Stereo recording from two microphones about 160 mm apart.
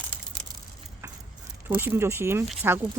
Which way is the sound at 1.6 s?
15° right (ahead or behind).